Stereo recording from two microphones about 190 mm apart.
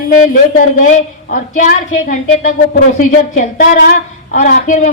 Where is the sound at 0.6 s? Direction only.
45° left (ahead or behind).